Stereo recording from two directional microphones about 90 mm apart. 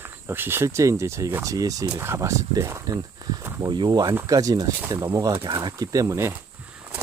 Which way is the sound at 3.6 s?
55° right (ahead or behind).